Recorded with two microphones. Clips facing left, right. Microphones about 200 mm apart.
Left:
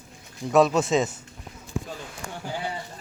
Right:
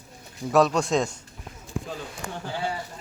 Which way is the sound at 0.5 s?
Centre (ahead or behind).